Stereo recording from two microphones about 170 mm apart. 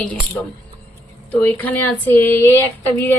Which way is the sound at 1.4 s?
10° left (ahead or behind).